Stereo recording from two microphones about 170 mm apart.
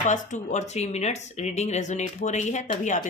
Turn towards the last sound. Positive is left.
turn(degrees=45)  # may be behind; listen again after turning